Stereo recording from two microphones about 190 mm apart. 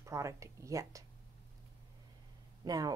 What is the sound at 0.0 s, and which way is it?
A woman's voice, 15° right (ahead or behind).